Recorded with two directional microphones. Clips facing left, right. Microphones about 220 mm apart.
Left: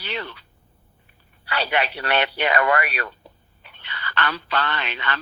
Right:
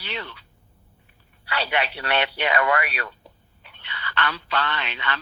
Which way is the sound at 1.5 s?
45° left (ahead or behind).